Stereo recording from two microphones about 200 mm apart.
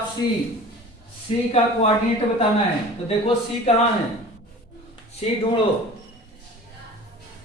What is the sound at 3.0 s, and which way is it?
Speech, 30° left (ahead or behind).